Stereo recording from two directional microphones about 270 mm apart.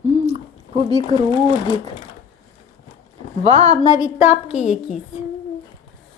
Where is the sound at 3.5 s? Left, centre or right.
Right.